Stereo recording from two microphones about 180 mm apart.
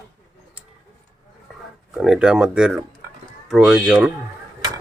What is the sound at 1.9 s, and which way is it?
Speech, centre (ahead or behind).